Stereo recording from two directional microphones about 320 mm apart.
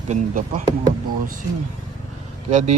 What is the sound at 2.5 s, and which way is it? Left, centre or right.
Speech, right.